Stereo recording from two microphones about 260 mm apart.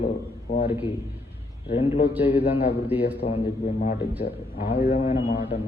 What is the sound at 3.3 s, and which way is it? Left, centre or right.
A man's voice, left.